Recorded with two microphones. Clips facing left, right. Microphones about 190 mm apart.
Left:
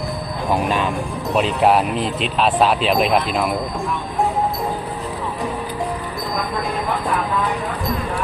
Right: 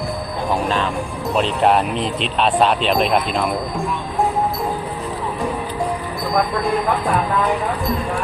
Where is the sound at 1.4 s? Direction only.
5° left (ahead or behind).